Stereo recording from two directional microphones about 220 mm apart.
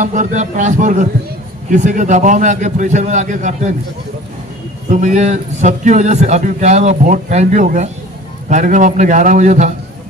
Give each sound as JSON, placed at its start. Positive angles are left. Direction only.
{"t": 0.0, "sound": "a man's voice", "side_deg": -35}
{"t": 4.9, "sound": "a man's voice", "side_deg": -35}